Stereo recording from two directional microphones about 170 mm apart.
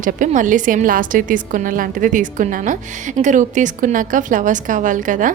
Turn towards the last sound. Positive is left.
turn(degrees=-50)  # may be behind; listen again after turning